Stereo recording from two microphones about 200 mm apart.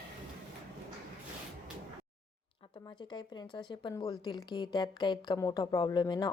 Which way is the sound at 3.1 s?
25° left (ahead or behind).